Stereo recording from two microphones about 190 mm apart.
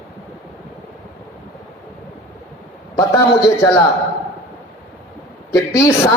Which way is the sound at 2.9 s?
15° left (ahead or behind).